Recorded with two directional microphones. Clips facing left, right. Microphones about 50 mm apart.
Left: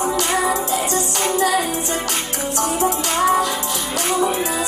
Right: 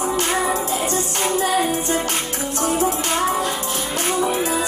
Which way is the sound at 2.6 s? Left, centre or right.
Right.